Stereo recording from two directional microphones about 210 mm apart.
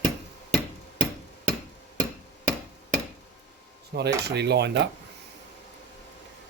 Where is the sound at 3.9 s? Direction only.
50° right (ahead or behind).